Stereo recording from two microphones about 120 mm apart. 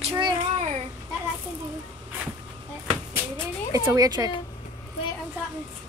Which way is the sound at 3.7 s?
30° right (ahead or behind).